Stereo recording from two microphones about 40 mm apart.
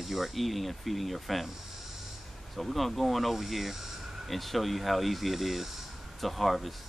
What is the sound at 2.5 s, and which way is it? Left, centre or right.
Speech, centre.